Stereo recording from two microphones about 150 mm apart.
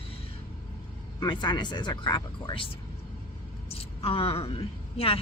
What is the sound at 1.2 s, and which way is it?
Speech, 30° left (ahead or behind).